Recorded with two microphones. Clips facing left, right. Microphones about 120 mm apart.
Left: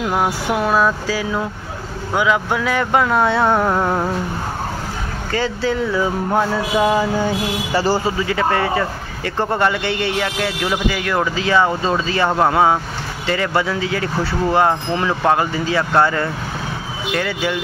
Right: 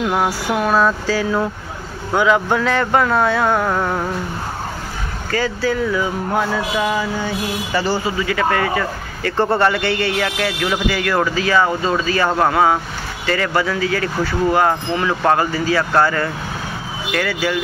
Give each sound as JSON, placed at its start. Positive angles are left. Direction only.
{"t": 0.0, "sound": "a sound", "side_deg": 5}
{"t": 2.1, "sound": "speech", "side_deg": 5}
{"t": 5.3, "sound": "speech", "side_deg": 25}